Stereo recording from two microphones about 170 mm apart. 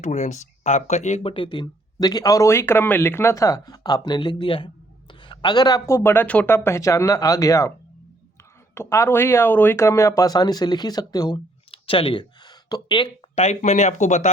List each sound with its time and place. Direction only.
0.0 s speech: 45° left (ahead or behind); by 7.7 s 20° left (ahead or behind)
8.7 s speech: 15° left (ahead or behind)
13.3 s speech: 45° left (ahead or behind)